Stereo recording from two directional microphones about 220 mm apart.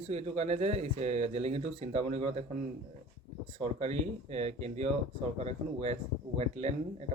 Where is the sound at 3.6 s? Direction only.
30° right (ahead or behind).